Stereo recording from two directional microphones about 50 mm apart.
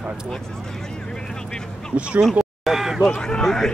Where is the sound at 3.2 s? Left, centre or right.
Centre.